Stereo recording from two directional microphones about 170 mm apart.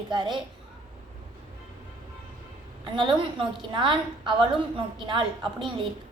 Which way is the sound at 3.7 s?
30° right (ahead or behind).